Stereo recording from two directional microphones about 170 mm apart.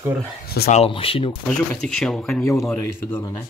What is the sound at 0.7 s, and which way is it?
Speech, 35° left (ahead or behind).